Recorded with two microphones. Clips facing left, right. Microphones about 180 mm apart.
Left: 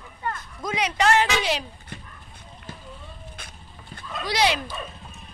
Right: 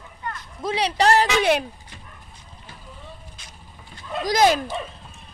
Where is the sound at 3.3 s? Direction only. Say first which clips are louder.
Left 2 dB; 55° left (ahead or behind).